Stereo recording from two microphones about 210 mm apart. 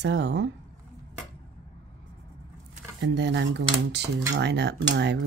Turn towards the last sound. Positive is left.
turn(degrees=-55)  # may be behind; listen again after turning